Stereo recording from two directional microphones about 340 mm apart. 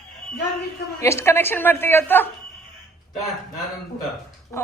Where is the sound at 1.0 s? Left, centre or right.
Centre.